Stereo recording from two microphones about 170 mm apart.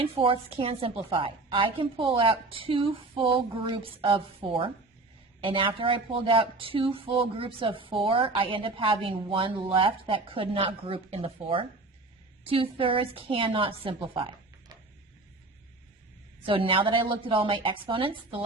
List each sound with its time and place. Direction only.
0.0 s speech: 30° right (ahead or behind)
16.5 s speech: 30° right (ahead or behind)